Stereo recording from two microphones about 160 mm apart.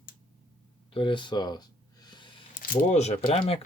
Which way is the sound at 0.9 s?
30° left (ahead or behind).